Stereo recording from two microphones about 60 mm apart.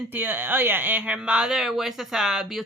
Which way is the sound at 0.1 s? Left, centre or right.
Right.